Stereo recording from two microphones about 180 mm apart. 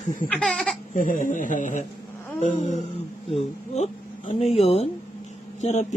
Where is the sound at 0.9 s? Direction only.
50° left (ahead or behind).